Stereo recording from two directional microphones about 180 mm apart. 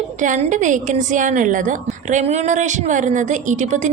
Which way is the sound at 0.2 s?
40° right (ahead or behind).